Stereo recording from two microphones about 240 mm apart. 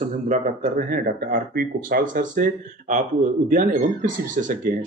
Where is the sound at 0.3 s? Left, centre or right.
Right.